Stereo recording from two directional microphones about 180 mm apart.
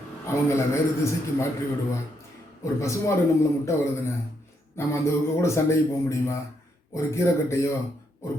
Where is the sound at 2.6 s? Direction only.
15° left (ahead or behind).